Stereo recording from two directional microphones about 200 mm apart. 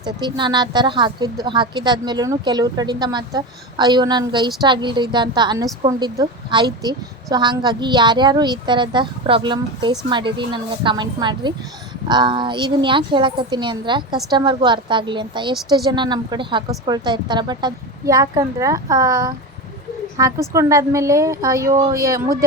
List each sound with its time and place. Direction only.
0.0 s a woman's voice: 20° right (ahead or behind)